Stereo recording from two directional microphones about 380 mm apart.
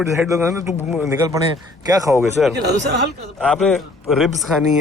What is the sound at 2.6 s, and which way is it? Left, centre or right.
Speech, right.